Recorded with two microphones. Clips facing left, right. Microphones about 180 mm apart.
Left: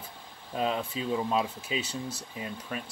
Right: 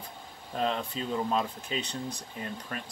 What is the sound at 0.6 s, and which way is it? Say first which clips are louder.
Speech: left 1 dB; 5° left (ahead or behind).